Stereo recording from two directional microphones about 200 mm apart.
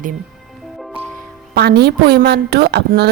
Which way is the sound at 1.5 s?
55° right (ahead or behind).